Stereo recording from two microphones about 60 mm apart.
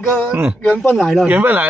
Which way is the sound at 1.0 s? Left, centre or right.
Centre.